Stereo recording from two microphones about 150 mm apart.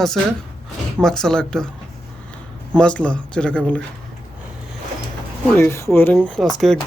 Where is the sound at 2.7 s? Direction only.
5° left (ahead or behind).